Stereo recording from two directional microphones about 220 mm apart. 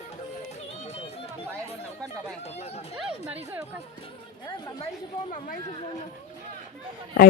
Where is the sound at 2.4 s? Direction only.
30° left (ahead or behind).